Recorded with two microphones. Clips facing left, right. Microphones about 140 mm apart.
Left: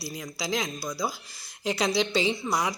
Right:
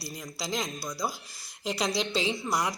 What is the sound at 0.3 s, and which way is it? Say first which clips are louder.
A woman's voice: left 3 dB; centre (ahead or behind).